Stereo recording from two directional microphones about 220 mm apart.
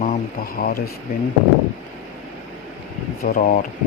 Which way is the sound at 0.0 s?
40° left (ahead or behind).